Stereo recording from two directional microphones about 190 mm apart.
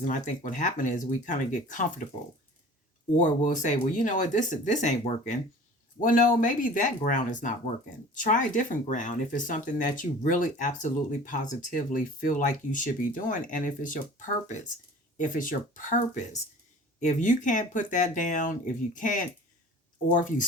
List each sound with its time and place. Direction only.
0.0 s speech: 45° left (ahead or behind)
3.2 s speech: 40° left (ahead or behind)